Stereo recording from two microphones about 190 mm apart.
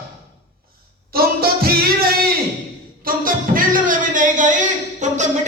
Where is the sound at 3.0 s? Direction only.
45° right (ahead or behind).